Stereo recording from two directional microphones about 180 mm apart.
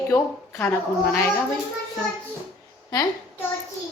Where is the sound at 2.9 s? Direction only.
20° left (ahead or behind).